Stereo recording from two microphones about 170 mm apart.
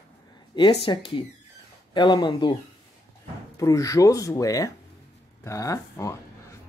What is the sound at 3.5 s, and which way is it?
Speech, 20° left (ahead or behind).